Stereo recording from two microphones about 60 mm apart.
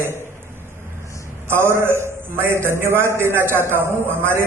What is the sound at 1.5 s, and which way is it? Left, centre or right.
A man's voice, right.